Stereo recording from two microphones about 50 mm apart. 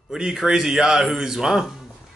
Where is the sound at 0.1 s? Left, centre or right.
Centre.